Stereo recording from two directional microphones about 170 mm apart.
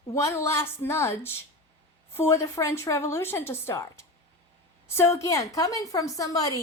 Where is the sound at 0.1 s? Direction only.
15° left (ahead or behind).